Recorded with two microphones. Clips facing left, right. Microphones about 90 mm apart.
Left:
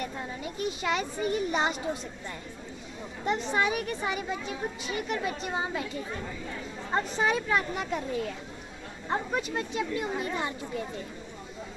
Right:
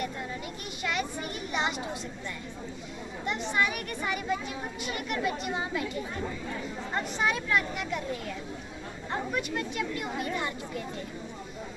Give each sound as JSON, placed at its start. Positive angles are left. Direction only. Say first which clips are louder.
{"t": 0.8, "sound": "a woman's voice", "louder": "left 2 dB", "side_deg": 30}
{"t": 3.3, "sound": "speech", "louder": "left 2 dB", "side_deg": 35}
{"t": 6.9, "sound": "a woman's voice", "louder": "left 3 dB", "side_deg": 30}
{"t": 9.3, "sound": "speech", "louder": "left 1 dB", "side_deg": 30}